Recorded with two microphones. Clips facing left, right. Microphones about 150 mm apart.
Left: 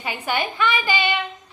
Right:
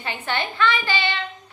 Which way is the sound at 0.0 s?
10° left (ahead or behind).